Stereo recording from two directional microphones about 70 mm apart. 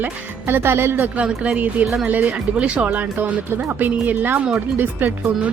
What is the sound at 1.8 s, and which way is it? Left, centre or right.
Speech, centre.